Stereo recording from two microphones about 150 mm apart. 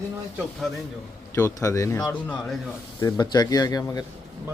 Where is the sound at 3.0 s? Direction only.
25° left (ahead or behind).